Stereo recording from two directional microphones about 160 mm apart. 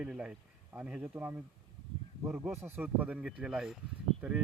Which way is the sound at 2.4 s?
15° right (ahead or behind).